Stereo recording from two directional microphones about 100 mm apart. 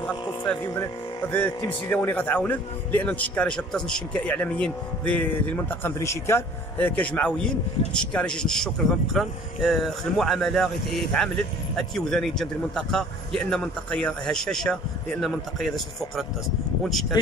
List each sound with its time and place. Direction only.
0.0 s speech: 15° left (ahead or behind)
7.0 s a man's voice: 15° left (ahead or behind)